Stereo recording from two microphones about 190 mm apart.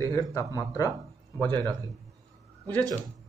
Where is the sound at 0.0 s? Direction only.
15° left (ahead or behind).